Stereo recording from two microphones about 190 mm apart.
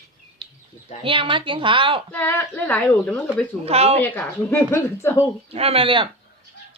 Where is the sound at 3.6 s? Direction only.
30° right (ahead or behind).